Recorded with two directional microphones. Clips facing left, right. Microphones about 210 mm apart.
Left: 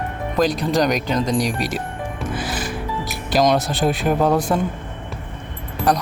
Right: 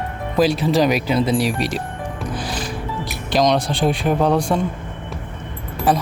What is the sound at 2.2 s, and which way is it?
Music, 5° left (ahead or behind).